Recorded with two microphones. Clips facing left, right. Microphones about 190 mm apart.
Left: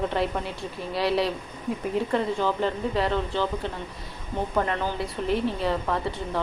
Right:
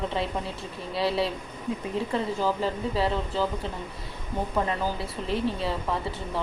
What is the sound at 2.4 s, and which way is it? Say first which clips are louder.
A woman's voice: left 1 dB; 5° right (ahead or behind).